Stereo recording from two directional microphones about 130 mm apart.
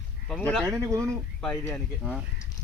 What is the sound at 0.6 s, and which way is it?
Speech, 25° right (ahead or behind).